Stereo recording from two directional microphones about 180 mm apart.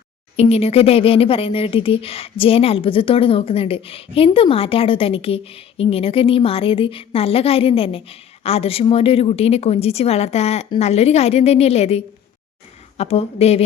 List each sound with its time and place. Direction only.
0.3 s speech: 35° left (ahead or behind)